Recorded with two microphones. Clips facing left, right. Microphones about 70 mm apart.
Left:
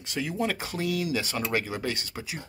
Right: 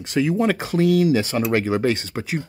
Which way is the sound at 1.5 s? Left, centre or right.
Right.